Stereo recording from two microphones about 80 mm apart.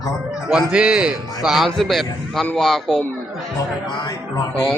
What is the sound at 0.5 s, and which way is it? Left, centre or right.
A man's voice, centre.